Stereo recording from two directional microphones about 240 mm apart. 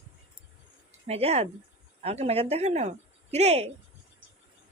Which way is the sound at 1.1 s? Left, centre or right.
Right.